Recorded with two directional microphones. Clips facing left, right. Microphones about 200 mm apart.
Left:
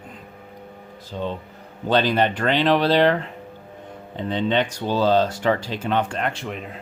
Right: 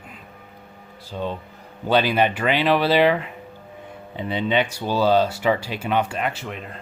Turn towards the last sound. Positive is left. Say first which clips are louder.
# left 2 dB
turn(degrees=0)  # may be behind; listen again after turning